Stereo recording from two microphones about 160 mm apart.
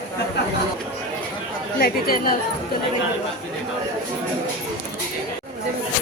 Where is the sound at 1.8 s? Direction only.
70° left (ahead or behind).